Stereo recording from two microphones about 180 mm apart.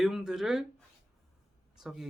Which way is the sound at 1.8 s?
Centre (ahead or behind).